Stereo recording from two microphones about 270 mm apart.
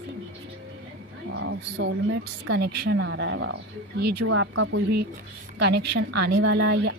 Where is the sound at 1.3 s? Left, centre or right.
Right.